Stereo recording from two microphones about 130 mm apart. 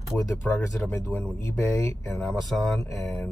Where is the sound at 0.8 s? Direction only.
10° left (ahead or behind).